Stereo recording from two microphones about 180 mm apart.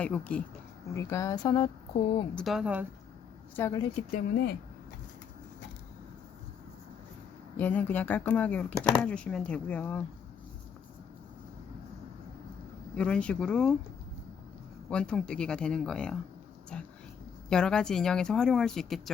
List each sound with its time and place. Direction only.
0.0 s speech: 5° left (ahead or behind); by 2.2 s 30° left (ahead or behind)
2.3 s speech: centre (ahead or behind)
3.5 s speech: 15° left (ahead or behind)
3.8 s speech: 30° left (ahead or behind)
4.1 s speech: 60° left (ahead or behind)
7.5 s speech: 10° left (ahead or behind)
13.0 s speech: 5° left (ahead or behind)
14.8 s speech: 5° left (ahead or behind)